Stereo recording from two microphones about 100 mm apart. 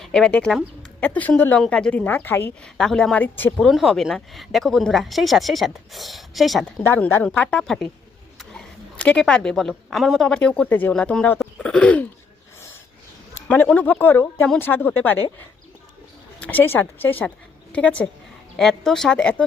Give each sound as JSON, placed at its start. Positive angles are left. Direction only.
{"t": 0.0, "sound": "speech", "side_deg": 5}
{"t": 0.5, "sound": "a sound", "side_deg": 5}
{"t": 1.0, "sound": "a woman's voice", "side_deg": 15}
{"t": 2.7, "sound": "a woman's voice", "side_deg": 5}
{"t": 6.8, "sound": "a woman's voice", "side_deg": 20}
{"t": 13.5, "sound": "a woman's voice", "side_deg": 15}